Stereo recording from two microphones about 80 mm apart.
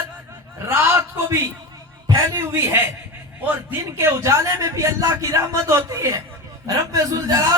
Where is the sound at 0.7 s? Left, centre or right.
Right.